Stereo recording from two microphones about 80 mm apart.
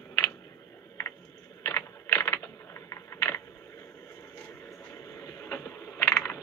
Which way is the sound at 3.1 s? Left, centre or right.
Left.